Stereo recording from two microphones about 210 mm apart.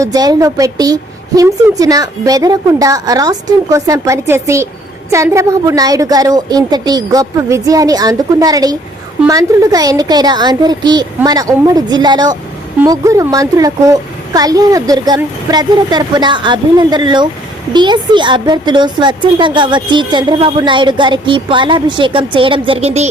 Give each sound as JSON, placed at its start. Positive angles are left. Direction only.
{"t": 0.0, "sound": "a child's voice", "side_deg": -15}